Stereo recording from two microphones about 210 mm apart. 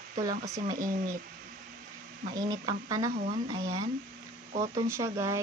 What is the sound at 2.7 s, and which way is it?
Speech, 15° right (ahead or behind).